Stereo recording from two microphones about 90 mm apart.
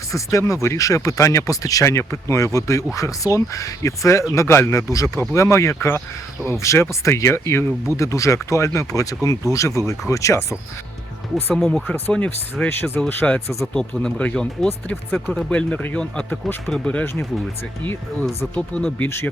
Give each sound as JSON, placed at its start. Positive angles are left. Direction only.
{"t": 0.1, "sound": "speech", "side_deg": 35}
{"t": 11.5, "sound": "speech", "side_deg": 5}
{"t": 12.6, "sound": "speech", "side_deg": 25}
{"t": 13.2, "sound": "speech", "side_deg": 15}
{"t": 18.5, "sound": "speech", "side_deg": 10}
{"t": 19.0, "sound": "speech", "side_deg": 25}